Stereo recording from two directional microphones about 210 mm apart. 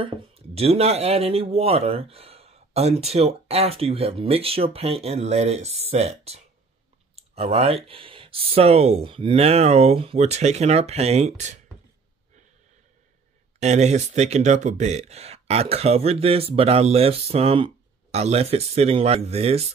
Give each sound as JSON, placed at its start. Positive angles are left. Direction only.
{"t": 0.0, "sound": "speech", "side_deg": -25}
{"t": 13.6, "sound": "speech", "side_deg": -30}